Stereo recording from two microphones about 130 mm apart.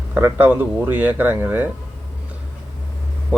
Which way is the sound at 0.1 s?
15° right (ahead or behind).